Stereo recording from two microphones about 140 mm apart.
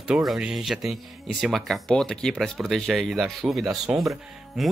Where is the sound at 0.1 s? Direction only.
5° right (ahead or behind).